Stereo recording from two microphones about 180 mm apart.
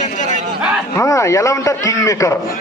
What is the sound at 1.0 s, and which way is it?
A man's voice, 15° left (ahead or behind).